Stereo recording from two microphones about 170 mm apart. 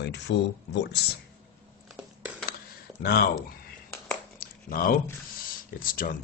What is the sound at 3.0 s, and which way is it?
Speech, 65° left (ahead or behind).